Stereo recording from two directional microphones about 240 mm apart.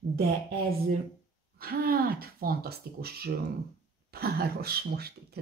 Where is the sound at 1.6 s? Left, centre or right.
Right.